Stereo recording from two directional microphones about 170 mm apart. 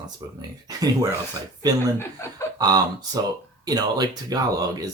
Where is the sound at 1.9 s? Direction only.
15° left (ahead or behind).